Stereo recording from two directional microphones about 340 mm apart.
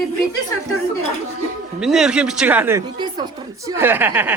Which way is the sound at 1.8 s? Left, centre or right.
Centre.